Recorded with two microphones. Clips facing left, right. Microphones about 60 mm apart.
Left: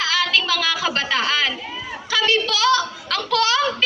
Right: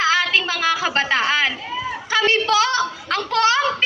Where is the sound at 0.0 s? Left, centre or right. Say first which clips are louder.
Right 2 dB; right.